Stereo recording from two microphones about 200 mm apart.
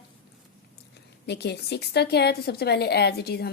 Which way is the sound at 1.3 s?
55° left (ahead or behind).